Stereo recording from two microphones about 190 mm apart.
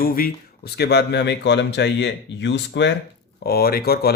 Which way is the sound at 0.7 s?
60° left (ahead or behind).